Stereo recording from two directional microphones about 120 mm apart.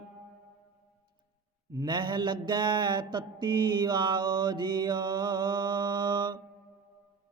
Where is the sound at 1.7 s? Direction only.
35° right (ahead or behind).